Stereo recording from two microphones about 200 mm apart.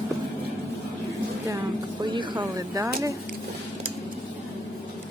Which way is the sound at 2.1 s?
25° right (ahead or behind).